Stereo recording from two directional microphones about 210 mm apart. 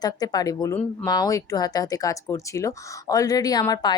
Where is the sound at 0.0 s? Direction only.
20° left (ahead or behind).